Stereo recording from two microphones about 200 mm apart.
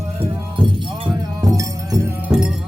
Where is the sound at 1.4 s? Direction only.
15° right (ahead or behind).